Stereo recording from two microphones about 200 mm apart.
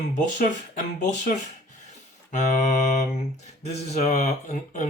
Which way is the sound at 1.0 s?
40° left (ahead or behind).